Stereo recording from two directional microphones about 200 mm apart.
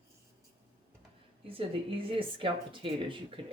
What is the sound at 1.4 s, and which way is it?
Speech, 25° right (ahead or behind).